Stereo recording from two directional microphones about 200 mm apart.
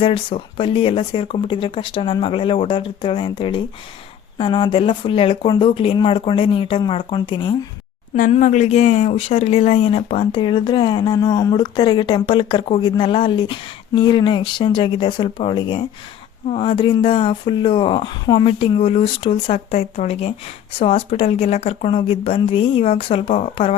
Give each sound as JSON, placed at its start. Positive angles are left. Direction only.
{"t": 0.0, "sound": "speech", "side_deg": 25}
{"t": 8.1, "sound": "speech", "side_deg": 40}